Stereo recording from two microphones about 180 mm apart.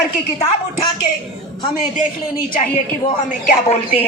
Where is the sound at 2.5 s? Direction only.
45° left (ahead or behind).